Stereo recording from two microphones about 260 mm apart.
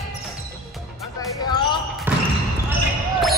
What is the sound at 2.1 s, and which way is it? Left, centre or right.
Basketball bounce, centre.